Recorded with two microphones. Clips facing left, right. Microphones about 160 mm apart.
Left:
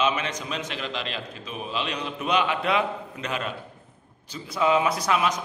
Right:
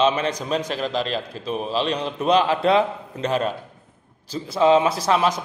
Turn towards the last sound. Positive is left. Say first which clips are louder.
# right 4 dB
turn(degrees=-30)  # may be behind; listen again after turning